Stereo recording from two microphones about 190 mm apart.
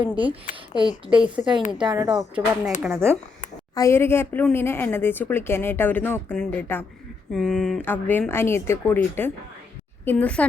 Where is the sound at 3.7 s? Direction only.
15° left (ahead or behind).